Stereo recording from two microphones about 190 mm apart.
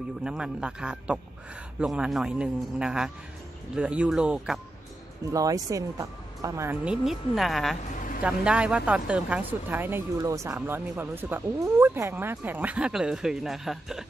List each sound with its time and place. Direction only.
0.2 s a man's voice: 5° right (ahead or behind)
5.3 s speech: 20° right (ahead or behind); by 7.7 s centre (ahead or behind)
7.9 s vehicle: 45° left (ahead or behind)
8.2 s speech: 5° right (ahead or behind)